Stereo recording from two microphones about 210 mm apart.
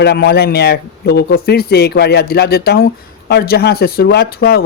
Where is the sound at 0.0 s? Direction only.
50° left (ahead or behind).